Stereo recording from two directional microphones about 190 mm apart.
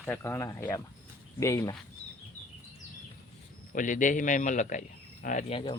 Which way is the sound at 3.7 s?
45° left (ahead or behind).